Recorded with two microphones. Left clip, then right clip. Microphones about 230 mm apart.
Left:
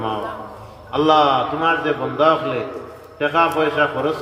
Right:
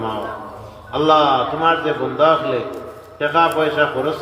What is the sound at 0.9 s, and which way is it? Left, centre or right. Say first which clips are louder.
A man's voice: right 1 dB; left.